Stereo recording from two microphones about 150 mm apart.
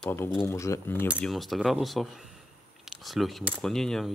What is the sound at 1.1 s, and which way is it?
Speech, centre (ahead or behind).